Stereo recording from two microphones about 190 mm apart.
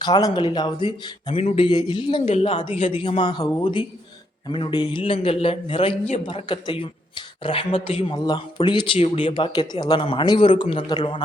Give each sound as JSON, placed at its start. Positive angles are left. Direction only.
{"t": 0.0, "sound": "a man's voice", "side_deg": 20}